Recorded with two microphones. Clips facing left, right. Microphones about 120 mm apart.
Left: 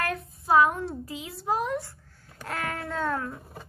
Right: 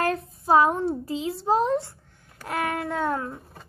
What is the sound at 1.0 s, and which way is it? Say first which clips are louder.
A woman's voice: right 6 dB; 30° right (ahead or behind).